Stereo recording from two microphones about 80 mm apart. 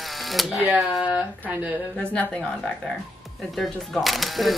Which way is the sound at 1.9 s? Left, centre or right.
Centre.